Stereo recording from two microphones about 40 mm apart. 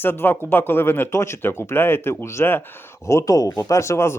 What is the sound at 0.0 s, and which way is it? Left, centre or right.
Speech, left.